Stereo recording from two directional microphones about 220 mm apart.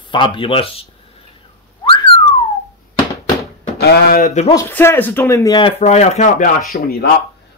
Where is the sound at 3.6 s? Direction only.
45° left (ahead or behind).